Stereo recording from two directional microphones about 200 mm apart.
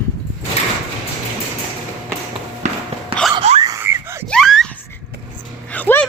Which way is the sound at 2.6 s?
35° right (ahead or behind).